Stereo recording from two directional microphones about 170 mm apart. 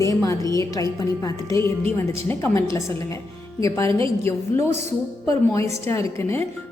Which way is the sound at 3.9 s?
30° right (ahead or behind).